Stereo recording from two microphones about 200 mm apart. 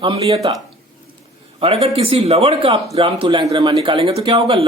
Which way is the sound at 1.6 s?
30° right (ahead or behind).